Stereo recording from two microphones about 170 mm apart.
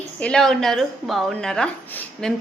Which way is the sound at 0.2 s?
5° left (ahead or behind).